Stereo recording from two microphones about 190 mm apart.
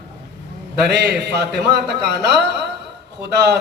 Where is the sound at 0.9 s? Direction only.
60° right (ahead or behind).